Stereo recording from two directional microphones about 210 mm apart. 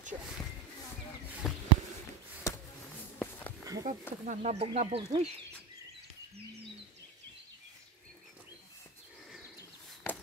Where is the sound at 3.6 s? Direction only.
15° right (ahead or behind).